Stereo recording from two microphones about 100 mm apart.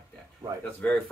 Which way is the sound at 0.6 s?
15° left (ahead or behind).